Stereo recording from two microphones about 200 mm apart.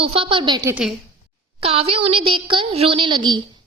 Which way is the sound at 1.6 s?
30° right (ahead or behind).